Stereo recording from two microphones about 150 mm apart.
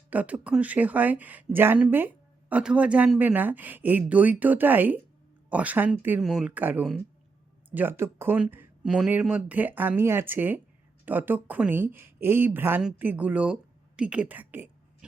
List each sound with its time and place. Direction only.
0.1 s speech: 10° right (ahead or behind)